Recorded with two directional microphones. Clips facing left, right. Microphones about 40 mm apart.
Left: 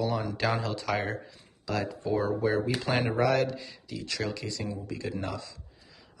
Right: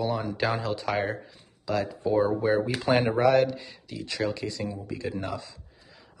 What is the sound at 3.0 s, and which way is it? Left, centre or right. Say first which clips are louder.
Speech: right 4 dB; centre.